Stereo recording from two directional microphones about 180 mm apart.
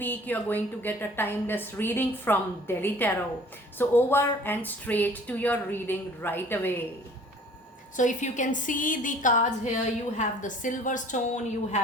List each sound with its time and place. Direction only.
0.0 s a woman's voice: 10° left (ahead or behind)
7.9 s a woman's voice: 45° left (ahead or behind)